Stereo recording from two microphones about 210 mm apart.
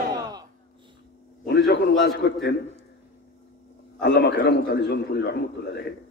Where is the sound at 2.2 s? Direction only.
50° left (ahead or behind).